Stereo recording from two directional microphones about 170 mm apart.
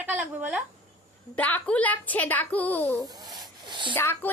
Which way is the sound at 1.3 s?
10° left (ahead or behind).